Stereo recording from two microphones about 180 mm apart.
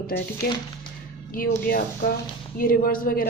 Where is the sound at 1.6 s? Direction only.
55° left (ahead or behind).